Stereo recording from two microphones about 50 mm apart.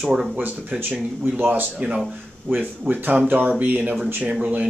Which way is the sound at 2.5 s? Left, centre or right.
Right.